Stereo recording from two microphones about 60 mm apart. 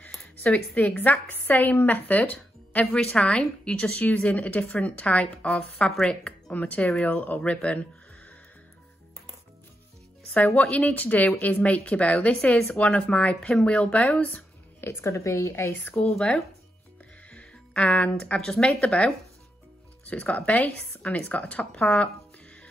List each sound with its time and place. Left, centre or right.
0.0 s a sound: left
1.3 s a woman's voice: left
2.3 s music: left
2.9 s a woman's voice: centre
3.9 s a woman's voice: left; by 6.1 s centre
6.5 s a woman's voice: left
6.8 s a woman's voice: centre
7.1 s a woman's voice: left
10.7 s a woman's voice: left; by 12.7 s centre
12.7 s a woman's voice: left
14.8 s a woman's voice: left
16.0 s a woman's voice: centre